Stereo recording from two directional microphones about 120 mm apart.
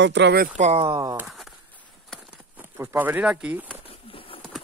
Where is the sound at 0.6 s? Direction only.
55° right (ahead or behind).